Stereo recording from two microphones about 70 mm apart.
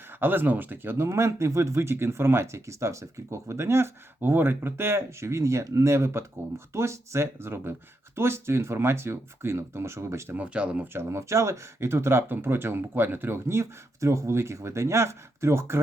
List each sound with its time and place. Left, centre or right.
0.1 s speech: right
10.3 s speech: centre
10.9 s speech: right